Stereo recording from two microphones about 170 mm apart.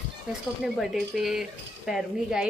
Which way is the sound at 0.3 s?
Centre (ahead or behind).